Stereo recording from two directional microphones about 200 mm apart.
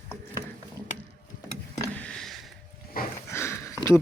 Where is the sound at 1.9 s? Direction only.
5° left (ahead or behind).